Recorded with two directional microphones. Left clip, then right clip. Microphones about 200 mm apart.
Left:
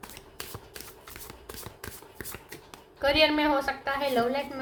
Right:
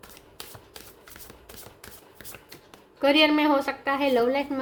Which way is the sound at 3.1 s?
50° right (ahead or behind).